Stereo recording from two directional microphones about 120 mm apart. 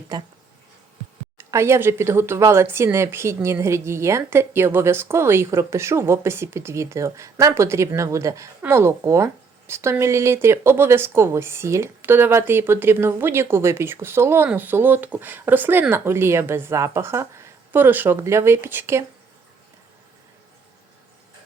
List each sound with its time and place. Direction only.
0.1 s speech: 35° right (ahead or behind)
1.4 s speech: 25° right (ahead or behind)